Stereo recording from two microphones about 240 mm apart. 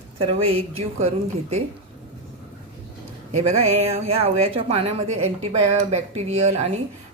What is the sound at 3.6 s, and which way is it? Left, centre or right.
A woman's voice, right.